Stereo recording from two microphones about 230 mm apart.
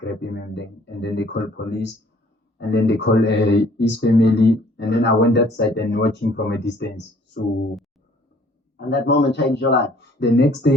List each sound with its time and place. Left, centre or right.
0.0 s speech: left
8.9 s speech: left